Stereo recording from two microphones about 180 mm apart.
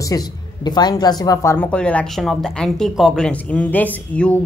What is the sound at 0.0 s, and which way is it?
Speech, 20° left (ahead or behind).